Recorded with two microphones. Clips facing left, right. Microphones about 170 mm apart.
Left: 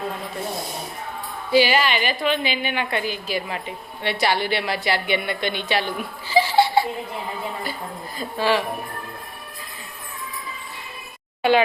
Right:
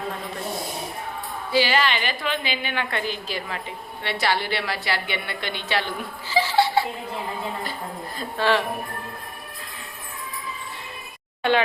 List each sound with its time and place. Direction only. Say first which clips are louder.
1.5 s a woman's voice: left 3 dB; 10° left (ahead or behind)
6.3 s a sound: left 3 dB; 15° left (ahead or behind)
8.2 s speech: left 1 dB; 5° left (ahead or behind)